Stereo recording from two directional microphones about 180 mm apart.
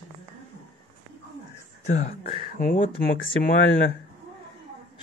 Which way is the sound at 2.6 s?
45° left (ahead or behind).